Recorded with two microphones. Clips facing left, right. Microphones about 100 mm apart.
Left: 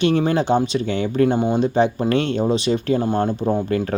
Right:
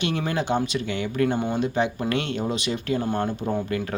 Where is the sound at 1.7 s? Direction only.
35° left (ahead or behind).